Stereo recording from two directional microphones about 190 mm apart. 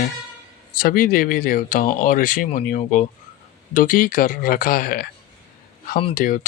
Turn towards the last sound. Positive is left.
turn(degrees=45)  # may be behind; listen again after turning